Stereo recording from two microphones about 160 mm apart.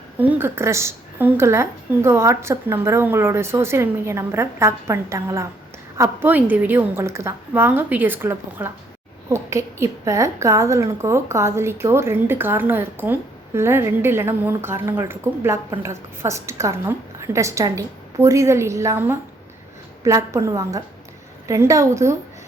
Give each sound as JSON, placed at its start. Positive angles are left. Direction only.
{"t": 0.2, "sound": "a woman's voice", "side_deg": -15}